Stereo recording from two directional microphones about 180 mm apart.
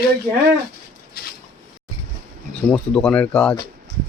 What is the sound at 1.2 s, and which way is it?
Squish, 55° left (ahead or behind).